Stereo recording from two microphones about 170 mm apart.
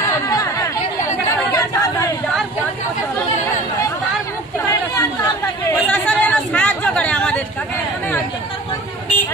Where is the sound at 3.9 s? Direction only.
20° left (ahead or behind).